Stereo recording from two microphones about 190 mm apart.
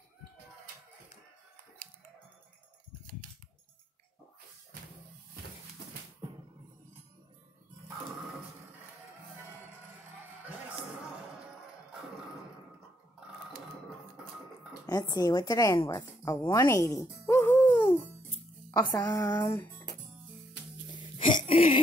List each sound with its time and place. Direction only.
14.9 s a woman's voice: 20° left (ahead or behind)
21.3 s throat clearing: 35° left (ahead or behind)